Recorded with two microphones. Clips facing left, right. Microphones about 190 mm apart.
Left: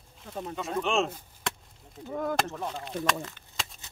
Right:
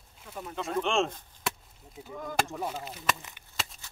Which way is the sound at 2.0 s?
55° left (ahead or behind).